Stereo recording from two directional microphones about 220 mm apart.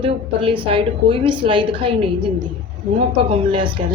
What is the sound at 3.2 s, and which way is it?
Speech, 25° right (ahead or behind).